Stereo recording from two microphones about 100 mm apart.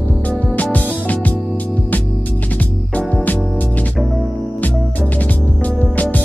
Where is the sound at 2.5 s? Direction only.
15° left (ahead or behind).